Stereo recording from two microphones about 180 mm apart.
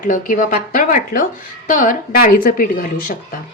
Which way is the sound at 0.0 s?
45° left (ahead or behind).